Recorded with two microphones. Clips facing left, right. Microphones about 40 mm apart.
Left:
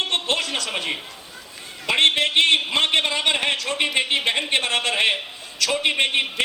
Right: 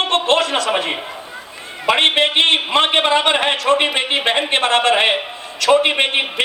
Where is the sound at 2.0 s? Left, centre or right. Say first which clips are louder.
Right 2 dB; right.